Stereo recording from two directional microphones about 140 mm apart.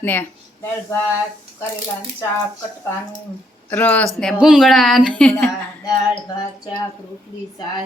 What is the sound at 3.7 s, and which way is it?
Speech, 10° left (ahead or behind).